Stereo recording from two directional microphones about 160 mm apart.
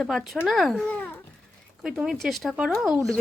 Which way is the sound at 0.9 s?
10° left (ahead or behind).